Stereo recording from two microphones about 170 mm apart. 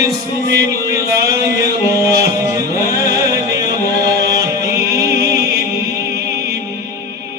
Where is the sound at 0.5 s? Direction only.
20° right (ahead or behind).